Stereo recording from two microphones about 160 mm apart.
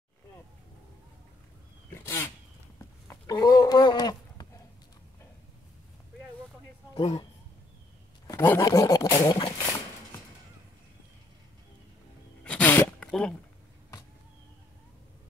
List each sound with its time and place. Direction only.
1.9 s wild animals: 15° left (ahead or behind)
3.1 s a sound: 20° left (ahead or behind)
6.9 s speech: 25° left (ahead or behind)
8.3 s speech: 15° left (ahead or behind)
12.4 s sneeze: 10° left (ahead or behind)